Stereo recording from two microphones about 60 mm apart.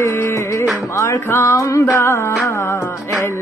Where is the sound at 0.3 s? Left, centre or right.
Left.